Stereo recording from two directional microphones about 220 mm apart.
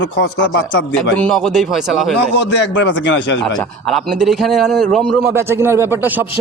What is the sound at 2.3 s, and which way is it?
A man's voice, 50° left (ahead or behind).